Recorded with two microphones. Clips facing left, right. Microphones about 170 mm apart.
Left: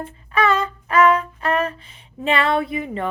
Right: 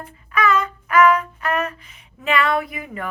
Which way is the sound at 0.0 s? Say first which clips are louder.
Left 1 dB; 30° left (ahead or behind).